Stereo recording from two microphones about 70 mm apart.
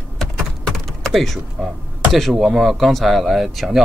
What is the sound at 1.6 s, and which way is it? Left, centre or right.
Speech, centre.